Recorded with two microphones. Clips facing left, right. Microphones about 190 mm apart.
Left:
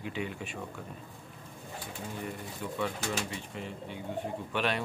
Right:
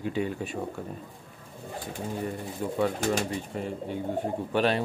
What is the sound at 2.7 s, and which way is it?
Speech, 45° right (ahead or behind).